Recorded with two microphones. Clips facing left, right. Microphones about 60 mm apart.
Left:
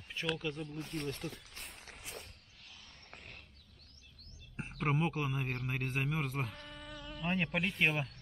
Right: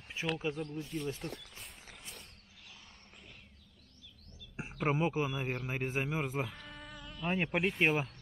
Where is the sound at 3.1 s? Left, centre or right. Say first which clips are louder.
Left 7 dB; left.